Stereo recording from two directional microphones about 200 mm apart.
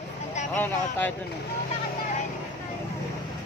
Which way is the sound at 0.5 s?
10° left (ahead or behind).